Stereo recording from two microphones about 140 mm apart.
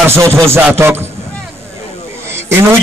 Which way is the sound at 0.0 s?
15° right (ahead or behind).